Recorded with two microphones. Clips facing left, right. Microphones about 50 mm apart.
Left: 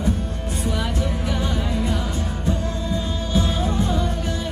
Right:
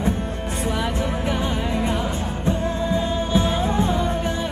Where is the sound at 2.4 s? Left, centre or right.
Right.